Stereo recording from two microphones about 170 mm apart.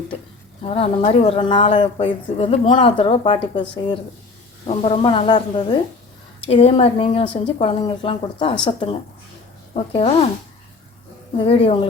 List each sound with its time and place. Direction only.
0.6 s speech: 35° left (ahead or behind)
11.3 s speech: 35° left (ahead or behind)